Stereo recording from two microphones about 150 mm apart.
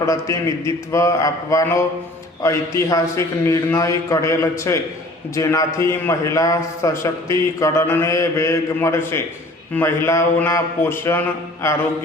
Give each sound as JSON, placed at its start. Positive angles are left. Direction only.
{"t": 0.0, "sound": "a man's voice", "side_deg": 20}